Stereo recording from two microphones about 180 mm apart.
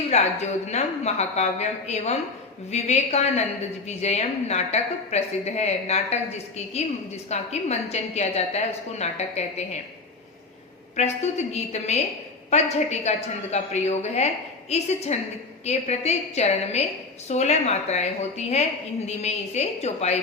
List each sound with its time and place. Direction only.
0.1 s a woman's voice: 40° left (ahead or behind)
7.3 s a woman's voice: 40° left (ahead or behind)
10.9 s a woman's voice: 40° left (ahead or behind)